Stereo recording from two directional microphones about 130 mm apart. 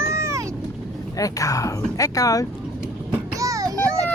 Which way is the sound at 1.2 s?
25° left (ahead or behind).